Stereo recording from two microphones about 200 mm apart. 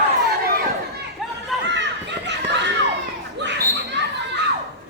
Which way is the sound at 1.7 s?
60° right (ahead or behind).